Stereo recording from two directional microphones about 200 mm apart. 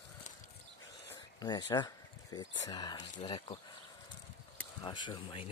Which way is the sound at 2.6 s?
20° left (ahead or behind).